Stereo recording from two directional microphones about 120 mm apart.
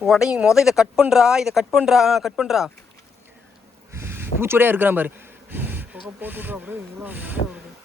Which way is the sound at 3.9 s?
20° right (ahead or behind).